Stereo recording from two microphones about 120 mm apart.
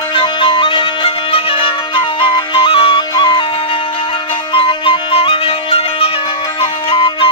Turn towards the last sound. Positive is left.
turn(degrees=50)  # may be behind; listen again after turning